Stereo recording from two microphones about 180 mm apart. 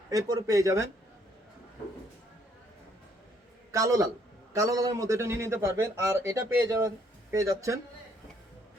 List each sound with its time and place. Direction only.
0.1 s speech: 20° right (ahead or behind)
3.7 s a man's voice: 20° right (ahead or behind)